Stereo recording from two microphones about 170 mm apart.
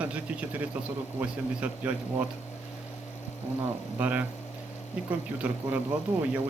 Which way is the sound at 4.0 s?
10° right (ahead or behind).